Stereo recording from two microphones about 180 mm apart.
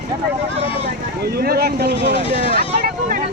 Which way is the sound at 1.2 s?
60° right (ahead or behind).